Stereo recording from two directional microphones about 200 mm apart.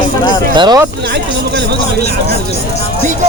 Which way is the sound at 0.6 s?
20° right (ahead or behind).